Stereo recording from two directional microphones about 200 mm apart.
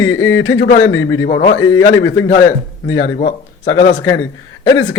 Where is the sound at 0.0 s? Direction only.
90° left.